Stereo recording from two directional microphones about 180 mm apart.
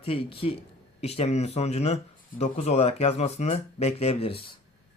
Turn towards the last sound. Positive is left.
turn(degrees=30)  # may be behind; listen again after turning